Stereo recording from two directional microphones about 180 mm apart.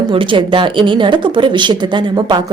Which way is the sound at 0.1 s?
30° right (ahead or behind).